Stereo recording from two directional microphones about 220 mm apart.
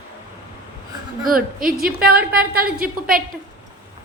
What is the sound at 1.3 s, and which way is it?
A woman's voice, 40° right (ahead or behind).